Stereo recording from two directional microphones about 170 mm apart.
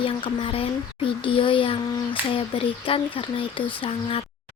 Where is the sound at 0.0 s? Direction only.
30° left (ahead or behind).